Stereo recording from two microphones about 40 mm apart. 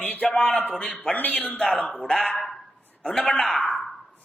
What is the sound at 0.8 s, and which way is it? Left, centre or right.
Speech, centre.